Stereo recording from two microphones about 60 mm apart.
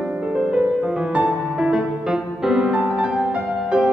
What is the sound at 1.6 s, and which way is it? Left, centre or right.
Music, centre.